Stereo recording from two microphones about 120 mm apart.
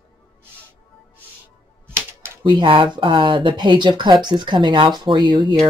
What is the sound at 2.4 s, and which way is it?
Speech, 45° right (ahead or behind).